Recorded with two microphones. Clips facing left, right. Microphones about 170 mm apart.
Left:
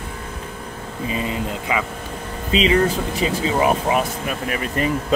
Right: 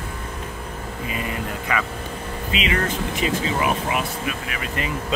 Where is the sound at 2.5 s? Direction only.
35° left (ahead or behind).